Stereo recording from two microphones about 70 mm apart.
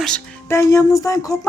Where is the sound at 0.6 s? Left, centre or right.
Left.